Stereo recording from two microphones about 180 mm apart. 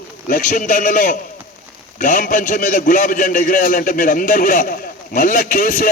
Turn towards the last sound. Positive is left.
turn(degrees=50)  # may be behind; listen again after turning